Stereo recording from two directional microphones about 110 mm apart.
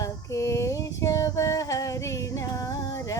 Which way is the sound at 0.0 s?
30° left (ahead or behind).